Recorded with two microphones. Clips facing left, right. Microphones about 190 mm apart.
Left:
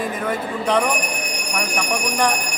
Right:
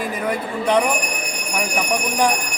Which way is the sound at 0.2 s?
10° right (ahead or behind).